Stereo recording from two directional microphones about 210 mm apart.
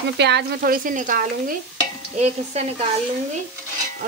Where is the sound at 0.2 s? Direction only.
55° right (ahead or behind); by 2.9 s 30° right (ahead or behind).